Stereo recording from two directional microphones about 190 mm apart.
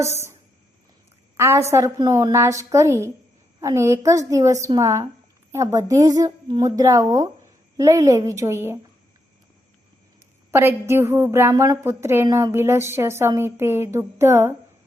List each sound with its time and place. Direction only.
1.4 s a woman's voice: 15° right (ahead or behind)
10.5 s a woman's voice: 10° right (ahead or behind)